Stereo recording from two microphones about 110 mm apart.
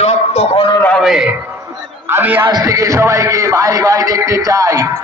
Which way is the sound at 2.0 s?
20° right (ahead or behind).